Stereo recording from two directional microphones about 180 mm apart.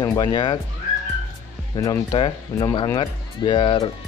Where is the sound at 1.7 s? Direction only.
25° left (ahead or behind).